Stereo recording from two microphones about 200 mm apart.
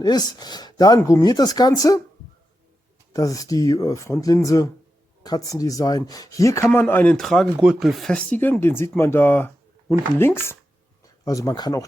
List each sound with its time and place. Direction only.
0.0 s speech: 20° left (ahead or behind)
3.1 s speech: 15° left (ahead or behind)